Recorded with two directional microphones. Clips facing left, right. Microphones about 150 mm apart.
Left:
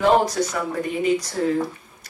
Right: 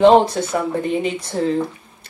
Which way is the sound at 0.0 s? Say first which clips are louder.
Right 6 dB; 25° right (ahead or behind).